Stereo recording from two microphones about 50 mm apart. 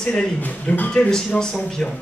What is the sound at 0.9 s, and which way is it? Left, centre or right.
Speech, centre.